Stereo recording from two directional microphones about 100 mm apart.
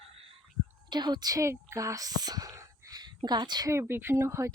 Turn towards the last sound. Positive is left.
turn(degrees=-25)  # may be behind; listen again after turning